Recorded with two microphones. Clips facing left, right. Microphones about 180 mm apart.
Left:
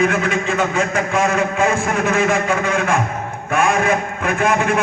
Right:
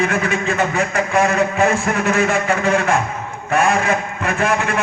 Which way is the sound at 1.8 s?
55° left (ahead or behind).